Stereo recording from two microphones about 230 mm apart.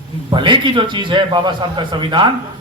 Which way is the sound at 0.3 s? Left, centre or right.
Centre.